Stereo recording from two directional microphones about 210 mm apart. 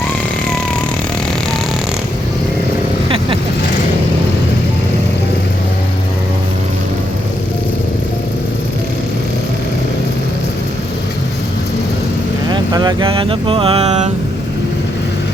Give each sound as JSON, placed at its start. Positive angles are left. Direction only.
{"t": 12.5, "sound": "vehicle", "side_deg": -20}